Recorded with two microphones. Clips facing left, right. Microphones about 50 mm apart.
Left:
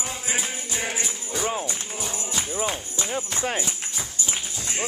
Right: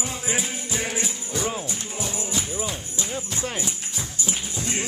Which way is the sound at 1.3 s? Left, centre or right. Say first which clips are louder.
Left 2 dB; centre.